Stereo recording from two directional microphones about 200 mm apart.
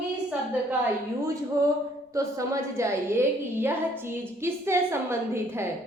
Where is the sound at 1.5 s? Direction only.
15° right (ahead or behind).